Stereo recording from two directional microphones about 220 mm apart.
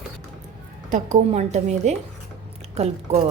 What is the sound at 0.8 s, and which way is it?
A woman's voice, 35° right (ahead or behind).